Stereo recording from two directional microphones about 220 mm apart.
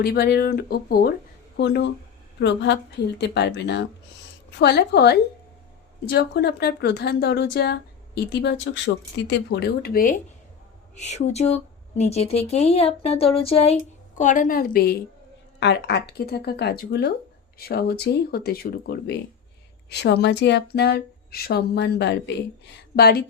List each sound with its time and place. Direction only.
0.0 s a woman's voice: 45° left (ahead or behind)